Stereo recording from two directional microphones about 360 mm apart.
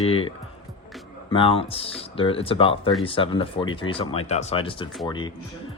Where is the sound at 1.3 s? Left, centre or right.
Centre.